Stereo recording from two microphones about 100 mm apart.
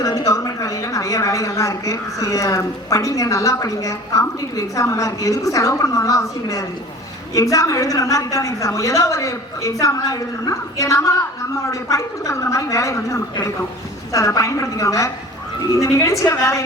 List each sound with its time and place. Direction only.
0.0 s a woman's voice: 35° left (ahead or behind)